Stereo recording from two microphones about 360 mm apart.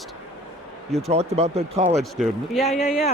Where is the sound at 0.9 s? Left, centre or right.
Centre.